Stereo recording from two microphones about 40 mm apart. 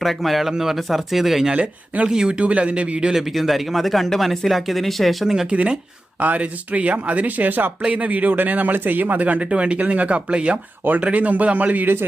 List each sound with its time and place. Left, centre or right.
0.0 s speech: centre
2.0 s speech: centre
2.4 s speech: right
3.3 s speech: centre
5.2 s speech: centre
5.5 s speech: right
7.8 s speech: right
11.0 s speech: right